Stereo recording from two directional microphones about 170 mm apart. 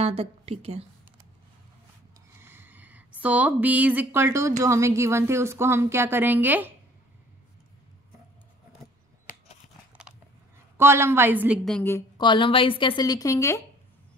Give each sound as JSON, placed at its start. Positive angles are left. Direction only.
{"t": 0.0, "sound": "a woman's voice", "side_deg": -35}
{"t": 2.4, "sound": "speech", "side_deg": -10}
{"t": 10.8, "sound": "speech", "side_deg": -15}
{"t": 12.2, "sound": "a woman's voice", "side_deg": 30}